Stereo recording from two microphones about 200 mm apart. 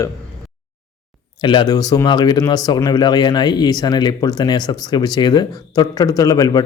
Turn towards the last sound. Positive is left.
turn(degrees=20)  # may be behind; listen again after turning